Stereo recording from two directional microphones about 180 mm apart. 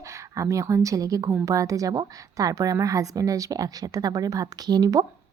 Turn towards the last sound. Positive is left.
turn(degrees=-20)  # may be behind; listen again after turning